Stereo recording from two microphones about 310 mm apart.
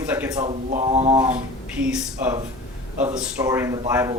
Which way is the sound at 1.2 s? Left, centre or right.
Centre.